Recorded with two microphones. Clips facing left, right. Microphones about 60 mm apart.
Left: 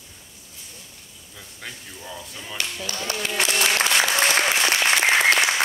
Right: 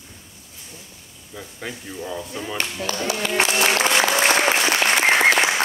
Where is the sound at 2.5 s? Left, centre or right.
Right.